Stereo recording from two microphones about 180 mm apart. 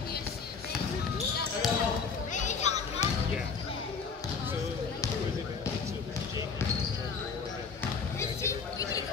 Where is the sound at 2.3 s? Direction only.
40° left (ahead or behind).